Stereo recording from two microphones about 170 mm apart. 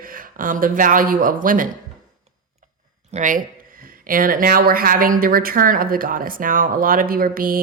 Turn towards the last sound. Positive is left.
turn(degrees=-55)  # may be behind; listen again after turning